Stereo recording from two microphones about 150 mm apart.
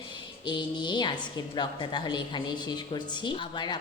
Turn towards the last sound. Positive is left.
turn(degrees=30)  # may be behind; listen again after turning